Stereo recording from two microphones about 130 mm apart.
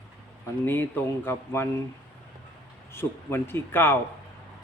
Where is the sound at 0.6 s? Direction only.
15° left (ahead or behind).